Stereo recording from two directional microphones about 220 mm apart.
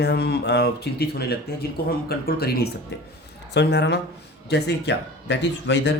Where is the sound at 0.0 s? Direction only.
50° left (ahead or behind).